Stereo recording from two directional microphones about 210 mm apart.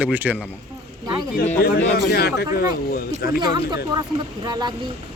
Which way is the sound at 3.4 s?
20° right (ahead or behind).